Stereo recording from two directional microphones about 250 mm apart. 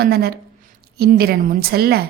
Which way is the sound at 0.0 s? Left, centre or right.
Right.